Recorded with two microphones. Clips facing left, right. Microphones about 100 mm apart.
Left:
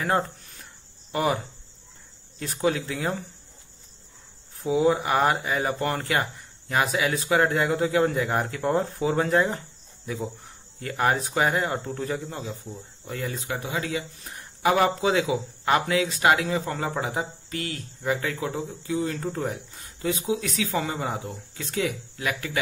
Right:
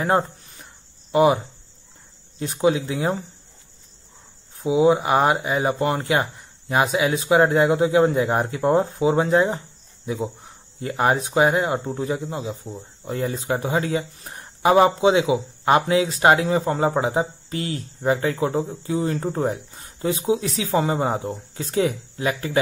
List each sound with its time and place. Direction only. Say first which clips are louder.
1.1 s speech: right 9 dB; 15° right (ahead or behind)
2.3 s speech: right 5 dB; 20° right (ahead or behind)
4.6 s speech: right 5 dB; 15° right (ahead or behind)
10.8 s speech: right 4 dB; 20° right (ahead or behind)